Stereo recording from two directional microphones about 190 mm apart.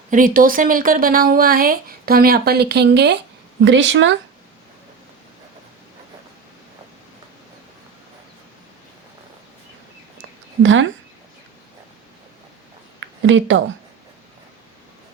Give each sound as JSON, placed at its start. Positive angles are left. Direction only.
{"t": 0.1, "sound": "speech", "side_deg": -45}
{"t": 3.6, "sound": "speech", "side_deg": -70}
{"t": 10.6, "sound": "speech", "side_deg": -80}
{"t": 13.2, "sound": "speech", "side_deg": -80}